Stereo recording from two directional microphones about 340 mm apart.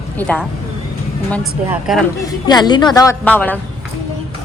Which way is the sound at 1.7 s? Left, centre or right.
Centre.